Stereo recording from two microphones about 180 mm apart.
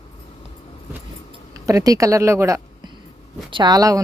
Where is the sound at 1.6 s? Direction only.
20° right (ahead or behind).